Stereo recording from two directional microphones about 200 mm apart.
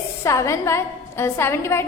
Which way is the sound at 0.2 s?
15° left (ahead or behind).